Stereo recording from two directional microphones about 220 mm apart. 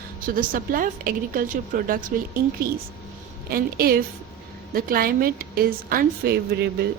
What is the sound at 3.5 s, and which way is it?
A woman's voice, 45° right (ahead or behind).